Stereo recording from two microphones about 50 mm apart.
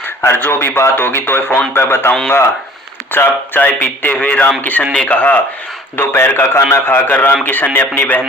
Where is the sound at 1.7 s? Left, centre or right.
Left.